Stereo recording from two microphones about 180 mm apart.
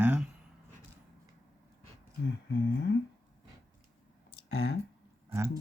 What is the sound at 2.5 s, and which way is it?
Speech, 70° left (ahead or behind).